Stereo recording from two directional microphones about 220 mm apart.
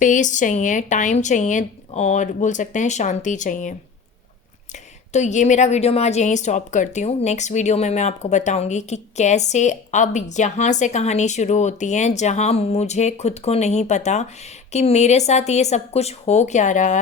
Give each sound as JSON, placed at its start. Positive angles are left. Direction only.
{"t": 0.0, "sound": "a woman's voice", "side_deg": 35}